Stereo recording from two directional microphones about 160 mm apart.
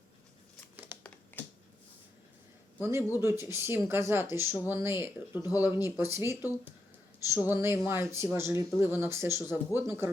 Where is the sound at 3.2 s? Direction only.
15° right (ahead or behind).